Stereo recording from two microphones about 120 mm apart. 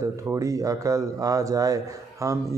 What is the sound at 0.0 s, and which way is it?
Speech, 25° right (ahead or behind).